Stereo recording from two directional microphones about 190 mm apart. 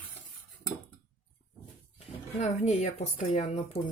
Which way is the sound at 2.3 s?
40° left (ahead or behind).